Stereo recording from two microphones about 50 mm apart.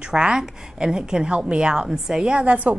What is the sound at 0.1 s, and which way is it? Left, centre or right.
A woman's voice, centre.